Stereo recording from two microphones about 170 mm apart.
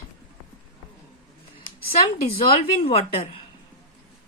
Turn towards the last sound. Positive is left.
turn(degrees=35)  # may be behind; listen again after turning